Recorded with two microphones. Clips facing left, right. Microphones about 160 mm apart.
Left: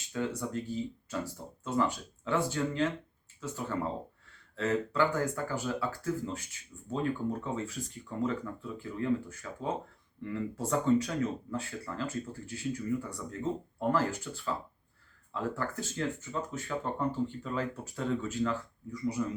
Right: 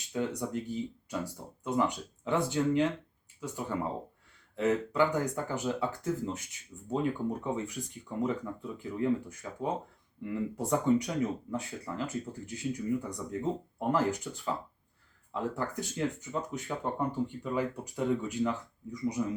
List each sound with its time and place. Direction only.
0.1 s speech: 20° right (ahead or behind)